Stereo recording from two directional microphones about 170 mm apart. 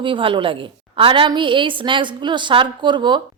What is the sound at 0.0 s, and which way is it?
A woman's voice, 30° right (ahead or behind).